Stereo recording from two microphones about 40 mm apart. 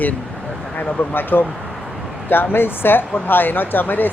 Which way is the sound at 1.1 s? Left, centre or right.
Left.